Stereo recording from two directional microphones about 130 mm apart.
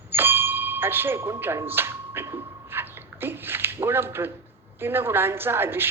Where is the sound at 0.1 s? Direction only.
15° right (ahead or behind).